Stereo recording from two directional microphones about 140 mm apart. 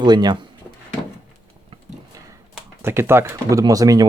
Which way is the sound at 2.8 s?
15° right (ahead or behind).